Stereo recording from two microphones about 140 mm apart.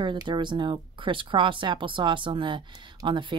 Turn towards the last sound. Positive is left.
turn(degrees=-35)  # may be behind; listen again after turning